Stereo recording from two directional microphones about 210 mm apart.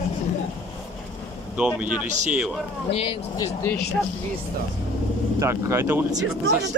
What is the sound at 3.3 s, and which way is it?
Speech, 15° left (ahead or behind).